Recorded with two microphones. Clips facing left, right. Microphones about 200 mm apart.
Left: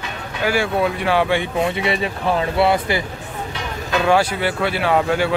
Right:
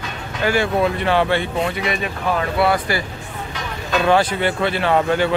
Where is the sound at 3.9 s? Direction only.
5° left (ahead or behind).